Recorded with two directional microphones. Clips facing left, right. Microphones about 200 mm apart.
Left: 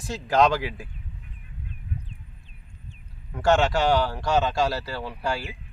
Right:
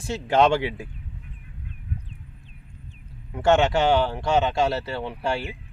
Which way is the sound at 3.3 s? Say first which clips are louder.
Right 2 dB; 20° right (ahead or behind).